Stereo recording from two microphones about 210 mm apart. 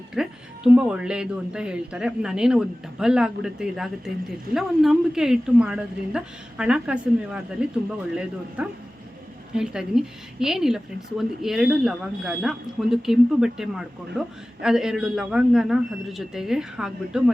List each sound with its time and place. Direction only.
0.1 s speech: 5° right (ahead or behind)